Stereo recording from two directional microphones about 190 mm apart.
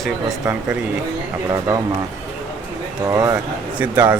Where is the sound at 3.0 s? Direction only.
15° right (ahead or behind).